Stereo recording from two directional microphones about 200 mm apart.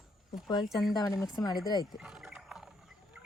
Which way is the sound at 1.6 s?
20° left (ahead or behind).